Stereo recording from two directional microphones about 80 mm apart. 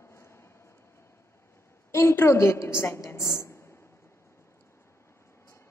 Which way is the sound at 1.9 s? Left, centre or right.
Left.